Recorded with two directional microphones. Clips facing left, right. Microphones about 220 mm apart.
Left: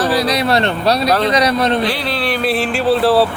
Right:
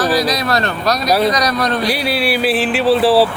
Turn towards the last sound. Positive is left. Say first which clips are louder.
# right 1 dB
turn(degrees=0)  # may be behind; listen again after turning